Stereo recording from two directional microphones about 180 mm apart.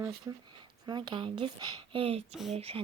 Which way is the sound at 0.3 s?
15° right (ahead or behind).